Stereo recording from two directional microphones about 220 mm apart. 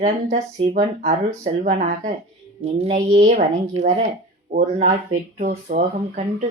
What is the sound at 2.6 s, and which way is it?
A woman's voice, 30° right (ahead or behind).